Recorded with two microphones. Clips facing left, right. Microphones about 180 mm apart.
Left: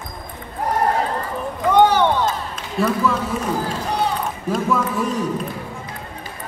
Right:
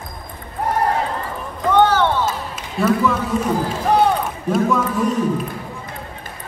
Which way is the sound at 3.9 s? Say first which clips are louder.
Right 8 dB; 55° right (ahead or behind).